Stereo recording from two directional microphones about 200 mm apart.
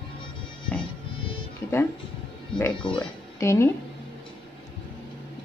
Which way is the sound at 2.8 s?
25° left (ahead or behind).